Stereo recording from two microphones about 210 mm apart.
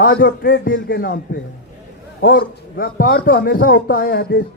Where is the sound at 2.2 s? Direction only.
45° left (ahead or behind).